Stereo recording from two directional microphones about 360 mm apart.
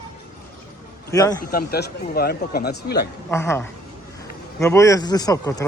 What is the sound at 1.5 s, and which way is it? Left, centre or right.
Speech, left.